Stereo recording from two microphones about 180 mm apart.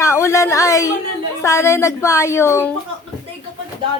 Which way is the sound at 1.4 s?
15° left (ahead or behind).